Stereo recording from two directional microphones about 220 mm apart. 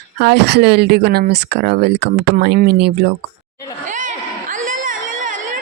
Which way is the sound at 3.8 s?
35° right (ahead or behind).